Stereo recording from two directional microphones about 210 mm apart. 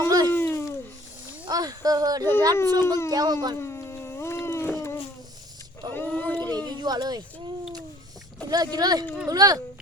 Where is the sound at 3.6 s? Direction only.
10° left (ahead or behind).